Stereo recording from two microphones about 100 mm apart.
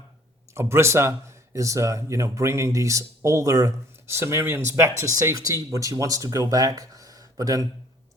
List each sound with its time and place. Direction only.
0.5 s speech: 25° right (ahead or behind)